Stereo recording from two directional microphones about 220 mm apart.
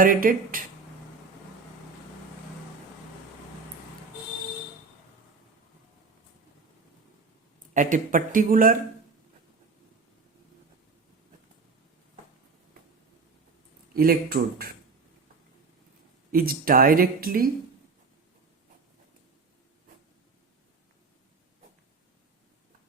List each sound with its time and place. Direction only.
0.0 s speech: 40° right (ahead or behind)
7.7 s speech: 35° right (ahead or behind)
13.9 s speech: 45° right (ahead or behind)
16.3 s speech: 40° right (ahead or behind)